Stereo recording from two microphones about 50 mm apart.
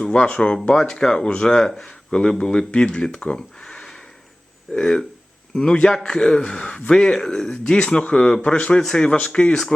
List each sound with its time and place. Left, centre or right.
0.0 s speech: centre
0.7 s speech: centre
3.3 s a sound: centre
4.7 s speech: centre
7.0 s speech: centre